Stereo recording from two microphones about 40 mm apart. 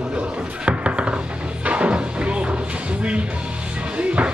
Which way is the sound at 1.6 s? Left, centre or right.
Right.